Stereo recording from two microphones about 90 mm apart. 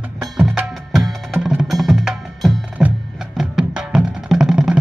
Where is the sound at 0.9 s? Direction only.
5° right (ahead or behind).